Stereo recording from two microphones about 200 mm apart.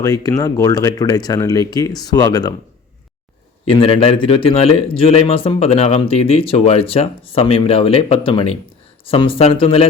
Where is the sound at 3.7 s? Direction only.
30° left (ahead or behind).